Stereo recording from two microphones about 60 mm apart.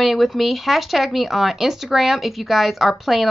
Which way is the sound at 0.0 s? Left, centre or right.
Centre.